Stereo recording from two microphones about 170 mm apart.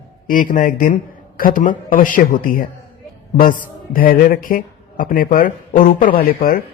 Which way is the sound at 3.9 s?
55° left (ahead or behind).